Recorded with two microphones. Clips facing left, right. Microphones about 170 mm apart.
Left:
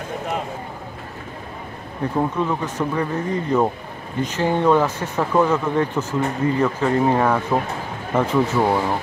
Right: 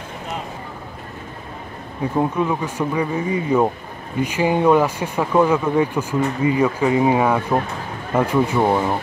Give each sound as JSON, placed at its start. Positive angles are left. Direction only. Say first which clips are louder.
{"t": 2.1, "sound": "speech", "louder": "right 2 dB", "side_deg": -10}